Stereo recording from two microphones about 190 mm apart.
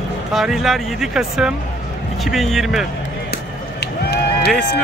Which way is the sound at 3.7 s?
60° left (ahead or behind).